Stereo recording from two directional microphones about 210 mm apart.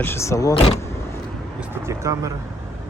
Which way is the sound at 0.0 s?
10° left (ahead or behind).